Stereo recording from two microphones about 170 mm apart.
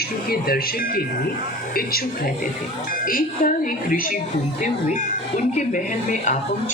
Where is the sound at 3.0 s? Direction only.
55° left (ahead or behind).